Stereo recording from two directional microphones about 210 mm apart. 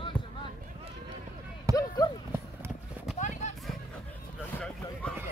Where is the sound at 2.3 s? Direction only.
10° right (ahead or behind).